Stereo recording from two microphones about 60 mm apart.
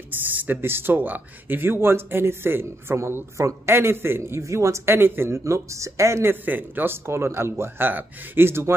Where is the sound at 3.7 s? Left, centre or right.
Right.